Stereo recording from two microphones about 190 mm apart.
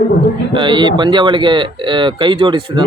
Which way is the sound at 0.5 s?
25° right (ahead or behind).